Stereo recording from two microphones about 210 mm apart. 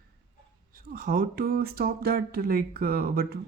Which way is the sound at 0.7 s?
40° right (ahead or behind).